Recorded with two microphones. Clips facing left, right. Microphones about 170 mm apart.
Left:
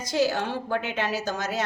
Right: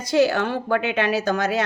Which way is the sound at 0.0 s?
65° right (ahead or behind).